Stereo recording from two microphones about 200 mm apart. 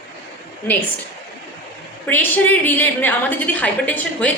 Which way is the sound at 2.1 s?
10° left (ahead or behind).